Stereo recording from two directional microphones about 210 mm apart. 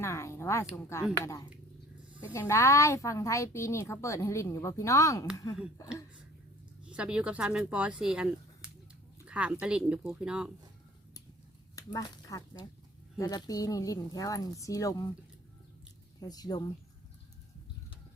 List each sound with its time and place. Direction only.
0.0 s a woman's voice: 15° left (ahead or behind)
6.8 s speech: 5° right (ahead or behind)
11.8 s a woman's voice: 20° left (ahead or behind)
16.2 s a woman's voice: 20° left (ahead or behind)